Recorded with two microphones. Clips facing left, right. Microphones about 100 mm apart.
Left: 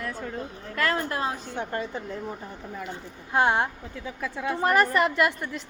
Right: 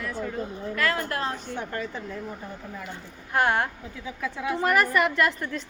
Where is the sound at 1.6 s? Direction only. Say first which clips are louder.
Left 1 dB; 25° left (ahead or behind).